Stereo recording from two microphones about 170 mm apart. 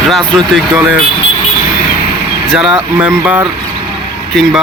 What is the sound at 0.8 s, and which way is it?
Speech, centre (ahead or behind).